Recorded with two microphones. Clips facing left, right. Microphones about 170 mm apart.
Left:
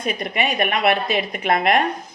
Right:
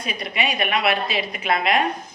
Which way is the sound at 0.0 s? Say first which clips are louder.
Left 3 dB; 50° left (ahead or behind).